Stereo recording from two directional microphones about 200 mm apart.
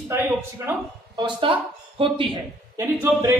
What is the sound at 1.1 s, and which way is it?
Speech, 25° right (ahead or behind).